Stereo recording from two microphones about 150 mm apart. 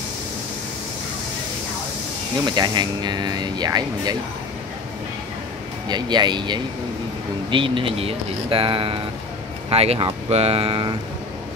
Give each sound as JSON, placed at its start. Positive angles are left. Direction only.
{"t": 2.4, "sound": "speech", "side_deg": -30}
{"t": 5.9, "sound": "speech", "side_deg": -30}